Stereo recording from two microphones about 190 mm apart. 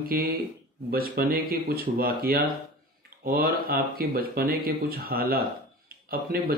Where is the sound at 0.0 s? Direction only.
50° right (ahead or behind).